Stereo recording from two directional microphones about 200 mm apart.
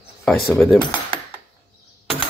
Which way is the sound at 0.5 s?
Centre (ahead or behind).